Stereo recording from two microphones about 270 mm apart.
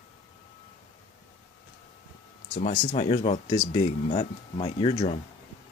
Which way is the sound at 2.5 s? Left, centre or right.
Left.